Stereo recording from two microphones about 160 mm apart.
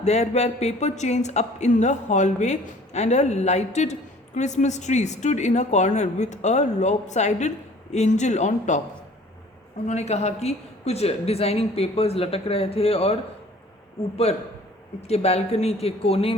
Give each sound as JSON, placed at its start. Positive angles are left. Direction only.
{"t": 0.0, "sound": "speech", "side_deg": 45}
{"t": 9.8, "sound": "a woman's voice", "side_deg": 45}
{"t": 15.0, "sound": "a woman's voice", "side_deg": 40}